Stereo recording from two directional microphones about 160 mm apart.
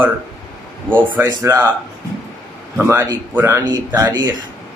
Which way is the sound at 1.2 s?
20° right (ahead or behind).